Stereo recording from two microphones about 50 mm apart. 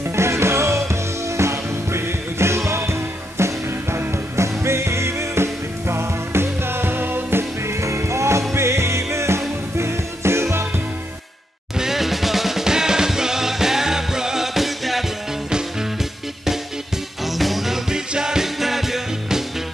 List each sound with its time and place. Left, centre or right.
0.0 s music: right
8.5 s music: right
11.8 s music: centre
17.2 s music: centre